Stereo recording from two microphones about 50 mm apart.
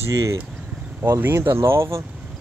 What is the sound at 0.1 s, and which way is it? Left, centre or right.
Speech, right.